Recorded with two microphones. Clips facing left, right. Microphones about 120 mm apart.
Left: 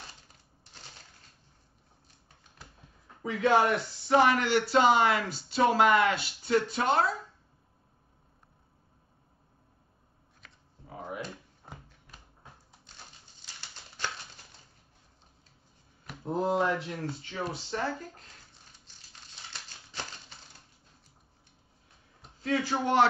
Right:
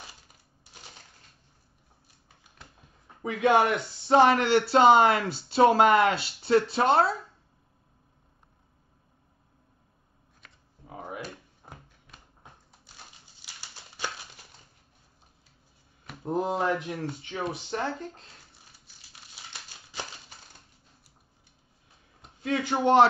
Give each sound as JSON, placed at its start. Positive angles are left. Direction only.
{"t": 3.2, "sound": "speech", "side_deg": -15}
{"t": 11.1, "sound": "a sound", "side_deg": -5}
{"t": 13.4, "sound": "crumpling", "side_deg": -10}
{"t": 16.2, "sound": "speech", "side_deg": -15}
{"t": 18.7, "sound": "a sound", "side_deg": -10}
{"t": 22.5, "sound": "speech", "side_deg": -25}